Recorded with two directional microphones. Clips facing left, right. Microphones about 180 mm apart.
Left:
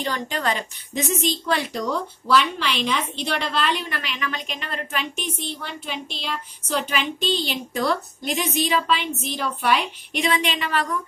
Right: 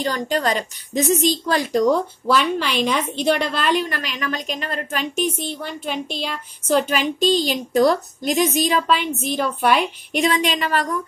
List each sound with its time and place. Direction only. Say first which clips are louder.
0.0 s a woman's voice: right 4 dB; 40° right (ahead or behind)